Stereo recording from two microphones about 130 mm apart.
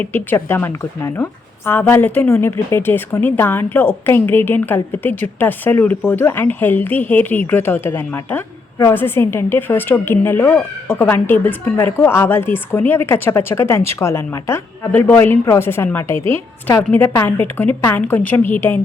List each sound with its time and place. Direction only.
0.0 s speech: 15° left (ahead or behind)